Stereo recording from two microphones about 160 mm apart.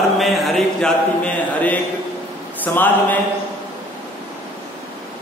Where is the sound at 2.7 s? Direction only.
10° left (ahead or behind).